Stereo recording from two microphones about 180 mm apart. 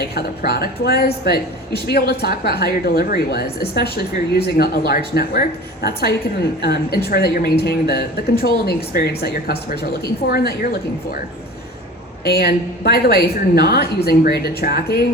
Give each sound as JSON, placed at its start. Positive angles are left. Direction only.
{"t": 0.1, "sound": "speech", "side_deg": 60}
{"t": 12.3, "sound": "speech", "side_deg": 60}